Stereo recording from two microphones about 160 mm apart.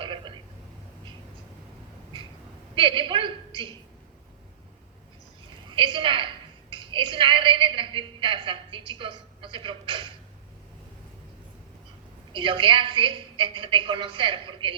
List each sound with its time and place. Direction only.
0.0 s a sound: 30° right (ahead or behind)
2.7 s a woman's voice: 30° right (ahead or behind)
5.7 s a woman's voice: 30° right (ahead or behind)
12.3 s a woman's voice: 30° right (ahead or behind)